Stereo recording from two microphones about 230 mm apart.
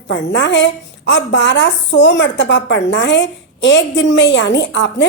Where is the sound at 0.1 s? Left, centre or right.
Left.